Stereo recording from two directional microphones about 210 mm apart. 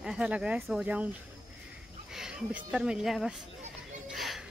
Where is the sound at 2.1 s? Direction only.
5° right (ahead or behind).